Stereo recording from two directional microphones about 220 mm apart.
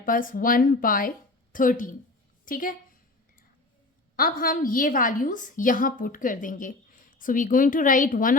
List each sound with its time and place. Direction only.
0.0 s a woman's voice: 40° left (ahead or behind)
4.2 s a woman's voice: 40° left (ahead or behind)